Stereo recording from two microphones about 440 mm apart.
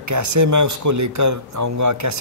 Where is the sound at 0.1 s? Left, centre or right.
Right.